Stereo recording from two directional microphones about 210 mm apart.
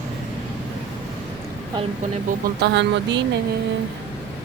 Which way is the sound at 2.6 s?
55° right (ahead or behind).